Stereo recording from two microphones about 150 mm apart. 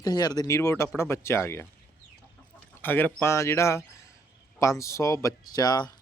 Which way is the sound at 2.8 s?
15° left (ahead or behind).